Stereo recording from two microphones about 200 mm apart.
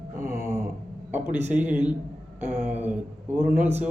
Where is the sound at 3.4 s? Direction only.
35° right (ahead or behind).